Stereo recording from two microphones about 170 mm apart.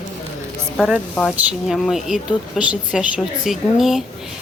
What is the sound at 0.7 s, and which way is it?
Speech, centre (ahead or behind).